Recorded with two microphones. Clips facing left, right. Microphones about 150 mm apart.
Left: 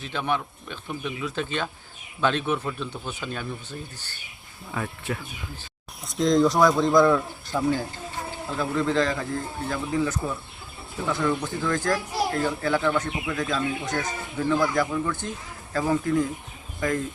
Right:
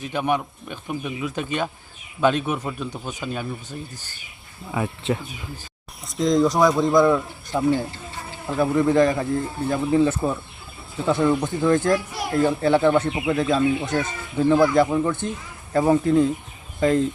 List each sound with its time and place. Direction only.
0.0 s speech: 15° right (ahead or behind)
5.0 s speech: 25° right (ahead or behind)
6.0 s speech: centre (ahead or behind)
7.5 s speech: 20° right (ahead or behind)